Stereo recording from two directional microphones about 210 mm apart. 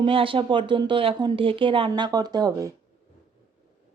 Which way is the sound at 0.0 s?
25° right (ahead or behind).